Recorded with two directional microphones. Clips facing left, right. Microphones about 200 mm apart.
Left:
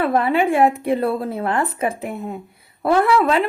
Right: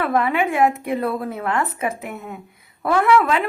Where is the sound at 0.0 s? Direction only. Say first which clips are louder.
Left 2 dB; 30° left (ahead or behind).